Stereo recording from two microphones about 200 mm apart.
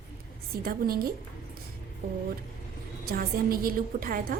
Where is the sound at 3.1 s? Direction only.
45° right (ahead or behind).